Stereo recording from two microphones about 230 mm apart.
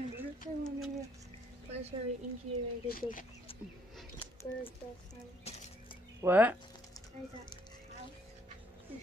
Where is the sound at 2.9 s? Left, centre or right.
Left.